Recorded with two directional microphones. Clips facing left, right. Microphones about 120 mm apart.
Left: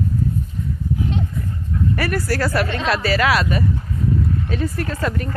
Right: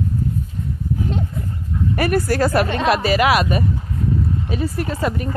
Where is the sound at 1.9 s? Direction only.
20° right (ahead or behind).